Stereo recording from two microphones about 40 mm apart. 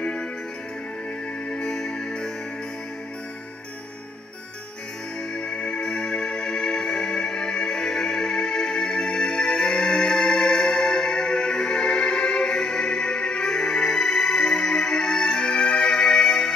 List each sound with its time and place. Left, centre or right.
0.0 s music: left
1.5 s music: centre
5.3 s music: left